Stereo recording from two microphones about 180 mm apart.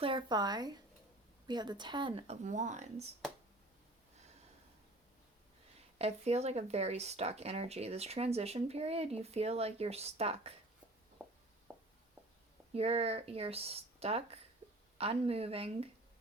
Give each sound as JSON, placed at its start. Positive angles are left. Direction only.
{"t": 0.0, "sound": "speech", "side_deg": -30}
{"t": 6.0, "sound": "speech", "side_deg": -35}
{"t": 11.2, "sound": "a sound", "side_deg": -10}
{"t": 12.7, "sound": "speech", "side_deg": -35}